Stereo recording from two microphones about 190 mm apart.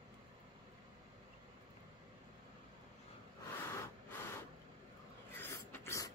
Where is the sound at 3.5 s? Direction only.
15° left (ahead or behind).